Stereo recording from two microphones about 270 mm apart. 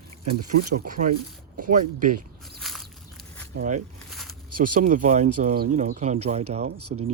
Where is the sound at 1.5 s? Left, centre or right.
Right.